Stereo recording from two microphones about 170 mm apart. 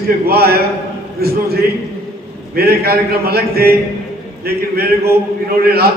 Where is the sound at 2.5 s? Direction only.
65° right (ahead or behind).